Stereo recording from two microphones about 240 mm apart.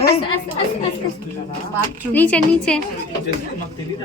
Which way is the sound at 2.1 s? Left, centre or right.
Centre.